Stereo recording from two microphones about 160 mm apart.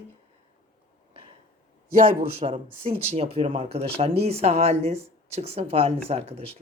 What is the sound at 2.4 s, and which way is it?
Speech, 40° right (ahead or behind).